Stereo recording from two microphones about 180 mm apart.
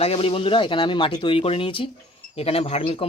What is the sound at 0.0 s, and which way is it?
Speech, 35° left (ahead or behind).